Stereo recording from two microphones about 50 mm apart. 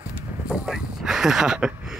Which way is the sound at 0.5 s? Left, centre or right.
Centre.